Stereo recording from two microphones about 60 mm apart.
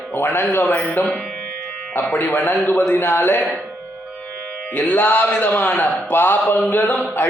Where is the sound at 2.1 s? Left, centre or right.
Left.